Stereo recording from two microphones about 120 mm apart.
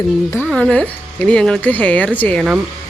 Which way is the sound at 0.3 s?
15° left (ahead or behind).